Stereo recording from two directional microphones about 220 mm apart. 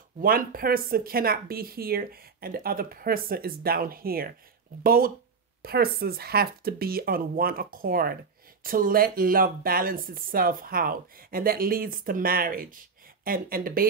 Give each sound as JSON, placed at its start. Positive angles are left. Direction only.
{"t": 0.2, "sound": "speech", "side_deg": -40}